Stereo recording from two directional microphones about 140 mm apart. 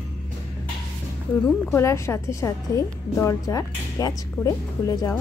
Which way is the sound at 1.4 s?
20° left (ahead or behind).